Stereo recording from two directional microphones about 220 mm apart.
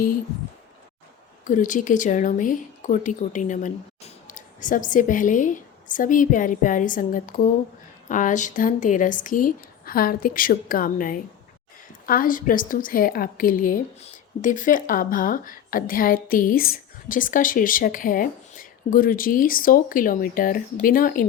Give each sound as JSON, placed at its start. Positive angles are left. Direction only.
{"t": 1.5, "sound": "a woman's voice", "side_deg": 35}